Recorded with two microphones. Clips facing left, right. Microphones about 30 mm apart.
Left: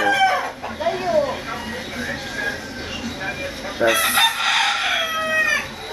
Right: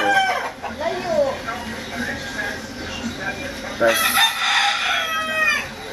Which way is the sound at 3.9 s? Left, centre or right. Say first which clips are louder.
Even; right.